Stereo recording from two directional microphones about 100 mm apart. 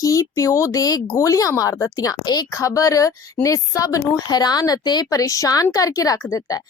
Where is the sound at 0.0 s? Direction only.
35° left (ahead or behind).